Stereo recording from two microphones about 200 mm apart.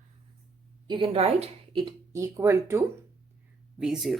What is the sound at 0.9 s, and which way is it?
Speech, 30° right (ahead or behind).